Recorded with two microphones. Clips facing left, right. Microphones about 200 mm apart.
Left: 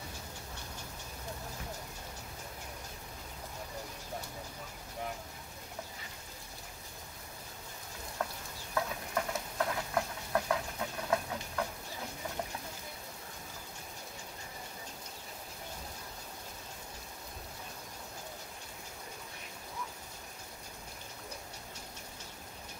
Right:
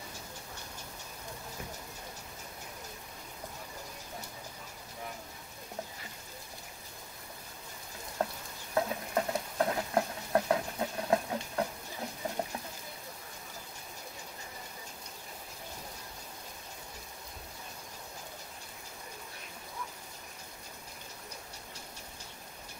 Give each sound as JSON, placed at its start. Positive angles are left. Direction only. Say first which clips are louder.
{"t": 8.2, "sound": "frying", "louder": "right 4 dB", "side_deg": -30}
{"t": 8.7, "sound": "stir", "louder": "right 4 dB", "side_deg": -30}